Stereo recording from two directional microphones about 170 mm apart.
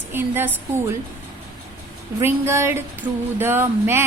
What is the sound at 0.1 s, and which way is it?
Speech, 15° right (ahead or behind).